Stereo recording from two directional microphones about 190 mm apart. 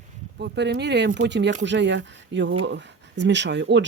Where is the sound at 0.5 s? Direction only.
65° right (ahead or behind).